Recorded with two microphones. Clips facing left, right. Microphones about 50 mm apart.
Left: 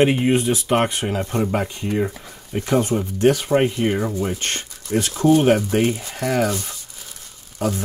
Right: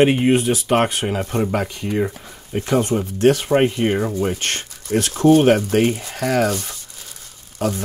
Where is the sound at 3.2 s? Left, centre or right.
Right.